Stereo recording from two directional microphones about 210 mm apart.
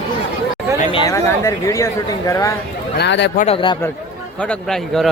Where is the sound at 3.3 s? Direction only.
30° left (ahead or behind).